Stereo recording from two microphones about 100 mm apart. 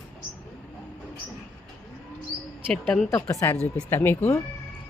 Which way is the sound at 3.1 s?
35° left (ahead or behind).